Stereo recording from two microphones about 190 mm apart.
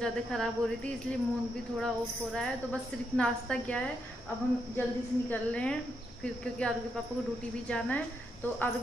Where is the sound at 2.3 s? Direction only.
5° left (ahead or behind).